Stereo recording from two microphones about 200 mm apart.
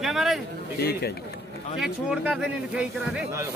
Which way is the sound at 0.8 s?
55° left (ahead or behind).